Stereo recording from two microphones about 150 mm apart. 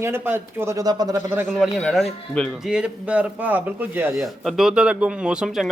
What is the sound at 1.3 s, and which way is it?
Speech, 10° right (ahead or behind).